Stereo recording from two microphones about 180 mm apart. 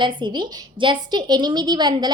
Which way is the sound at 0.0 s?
25° right (ahead or behind).